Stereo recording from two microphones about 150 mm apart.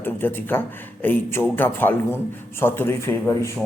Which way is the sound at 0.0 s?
15° left (ahead or behind).